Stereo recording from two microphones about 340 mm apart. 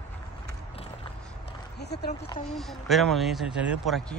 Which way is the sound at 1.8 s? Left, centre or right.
Left.